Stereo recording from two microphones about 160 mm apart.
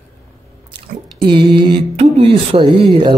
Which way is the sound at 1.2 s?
30° right (ahead or behind).